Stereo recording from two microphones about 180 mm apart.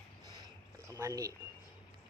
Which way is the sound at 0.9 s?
15° right (ahead or behind).